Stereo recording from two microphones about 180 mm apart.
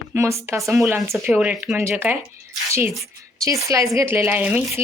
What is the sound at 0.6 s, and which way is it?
Speech, centre (ahead or behind).